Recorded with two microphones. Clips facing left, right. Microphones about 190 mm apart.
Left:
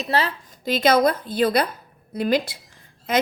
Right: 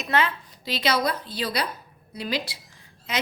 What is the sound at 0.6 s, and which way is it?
A woman's voice, 50° left (ahead or behind).